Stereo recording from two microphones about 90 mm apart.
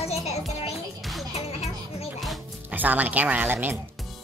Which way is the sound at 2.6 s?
20° right (ahead or behind).